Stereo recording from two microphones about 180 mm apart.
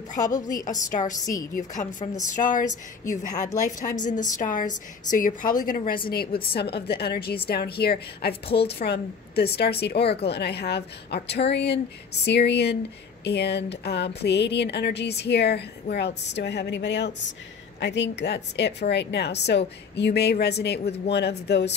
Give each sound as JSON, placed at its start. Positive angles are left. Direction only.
{"t": 0.2, "sound": "a woman's voice", "side_deg": 20}
{"t": 0.6, "sound": "a woman's voice", "side_deg": 45}
{"t": 3.1, "sound": "speech", "side_deg": 20}
{"t": 3.6, "sound": "a woman's voice", "side_deg": 45}